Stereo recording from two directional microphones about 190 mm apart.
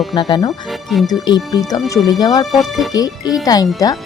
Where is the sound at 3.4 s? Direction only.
20° left (ahead or behind).